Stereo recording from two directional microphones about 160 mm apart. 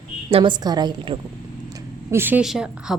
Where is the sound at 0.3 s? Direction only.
35° right (ahead or behind).